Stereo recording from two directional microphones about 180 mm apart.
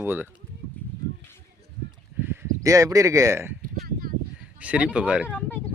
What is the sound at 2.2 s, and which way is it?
Speech, 15° right (ahead or behind).